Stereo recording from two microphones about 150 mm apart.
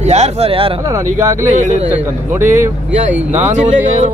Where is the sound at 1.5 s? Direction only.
55° right (ahead or behind).